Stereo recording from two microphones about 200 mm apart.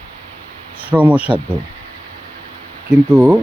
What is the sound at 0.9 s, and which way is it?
Speech, 5° right (ahead or behind).